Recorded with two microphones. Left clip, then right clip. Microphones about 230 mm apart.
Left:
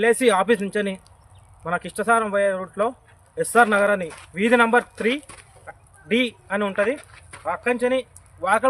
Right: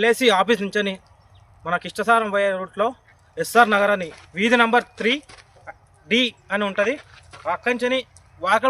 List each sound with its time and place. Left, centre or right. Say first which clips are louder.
0.0 s speech: right 1 dB; centre
7.0 s a sound: even; centre
7.4 s speech: even; centre